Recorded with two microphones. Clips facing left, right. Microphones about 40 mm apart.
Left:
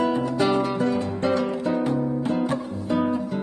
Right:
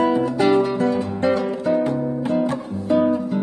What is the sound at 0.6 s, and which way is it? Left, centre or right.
Music, centre.